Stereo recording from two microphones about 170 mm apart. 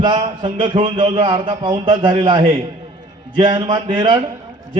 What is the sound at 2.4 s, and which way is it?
Speech, 40° right (ahead or behind).